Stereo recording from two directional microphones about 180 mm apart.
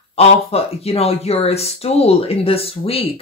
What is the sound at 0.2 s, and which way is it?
Speech, 35° left (ahead or behind).